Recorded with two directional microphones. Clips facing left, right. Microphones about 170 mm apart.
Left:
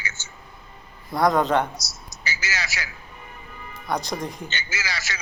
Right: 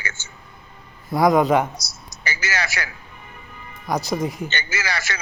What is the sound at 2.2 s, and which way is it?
Speech, 55° right (ahead or behind).